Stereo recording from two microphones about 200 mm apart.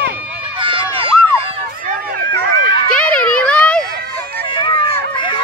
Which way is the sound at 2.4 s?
50° right (ahead or behind).